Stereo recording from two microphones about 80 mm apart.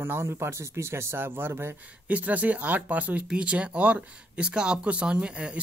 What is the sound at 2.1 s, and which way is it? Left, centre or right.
Speech, centre.